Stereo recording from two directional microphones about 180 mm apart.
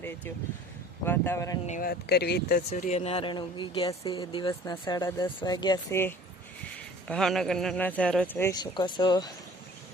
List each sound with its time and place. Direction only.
1.0 s speech: 10° left (ahead or behind)
1.6 s speech: 50° left (ahead or behind)
2.6 s speech: 40° left (ahead or behind); by 9.3 s 25° left (ahead or behind)